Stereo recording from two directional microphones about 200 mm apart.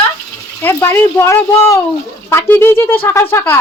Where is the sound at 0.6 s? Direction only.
10° left (ahead or behind).